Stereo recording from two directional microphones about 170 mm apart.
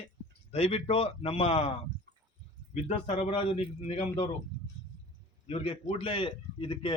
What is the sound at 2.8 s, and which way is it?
Speech, 40° left (ahead or behind).